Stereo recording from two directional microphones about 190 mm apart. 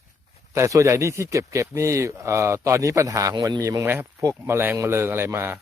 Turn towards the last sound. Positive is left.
turn(degrees=-10)  # may be behind; listen again after turning